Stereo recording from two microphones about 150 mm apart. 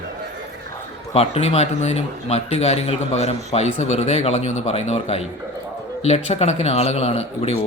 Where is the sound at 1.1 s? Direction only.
45° left (ahead or behind).